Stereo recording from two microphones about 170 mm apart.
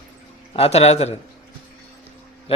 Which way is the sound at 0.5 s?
35° left (ahead or behind).